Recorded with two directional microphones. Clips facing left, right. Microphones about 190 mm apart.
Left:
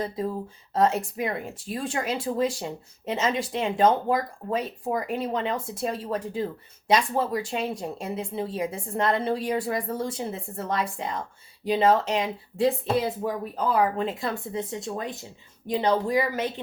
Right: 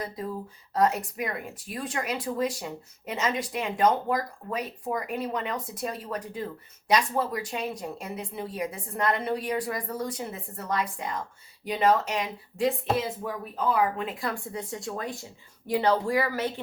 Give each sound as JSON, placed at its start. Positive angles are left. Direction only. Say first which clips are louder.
{"t": 0.7, "sound": "speech", "louder": "left 2 dB", "side_deg": 25}